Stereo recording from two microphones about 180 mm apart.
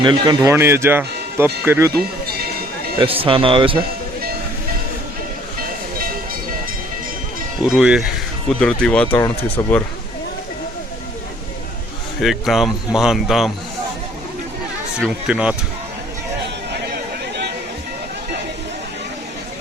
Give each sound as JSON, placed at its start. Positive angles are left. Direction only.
{"t": 0.0, "sound": "speech", "side_deg": -25}
{"t": 0.5, "sound": "speech", "side_deg": -15}
{"t": 3.0, "sound": "speech", "side_deg": -30}
{"t": 7.8, "sound": "speech", "side_deg": -5}
{"t": 12.2, "sound": "speech", "side_deg": 0}
{"t": 14.9, "sound": "speech", "side_deg": -5}
{"t": 16.7, "sound": "a sound", "side_deg": -65}